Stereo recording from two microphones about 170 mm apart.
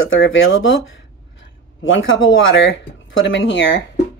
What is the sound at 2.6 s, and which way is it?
Speech, 90° left.